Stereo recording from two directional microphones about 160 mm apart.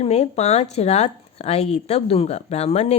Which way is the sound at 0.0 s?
40° left (ahead or behind).